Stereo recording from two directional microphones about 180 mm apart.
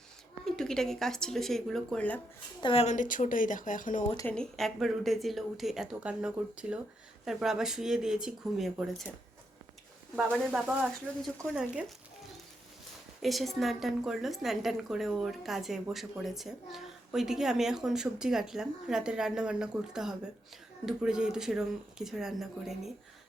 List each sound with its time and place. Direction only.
0.4 s a woman's voice: 5° left (ahead or behind)
2.6 s speech: 30° left (ahead or behind); by 4.0 s 45° left (ahead or behind)
4.3 s a woman's voice: 5° left (ahead or behind)
10.2 s a woman's voice: 5° right (ahead or behind)
13.2 s a woman's voice: centre (ahead or behind)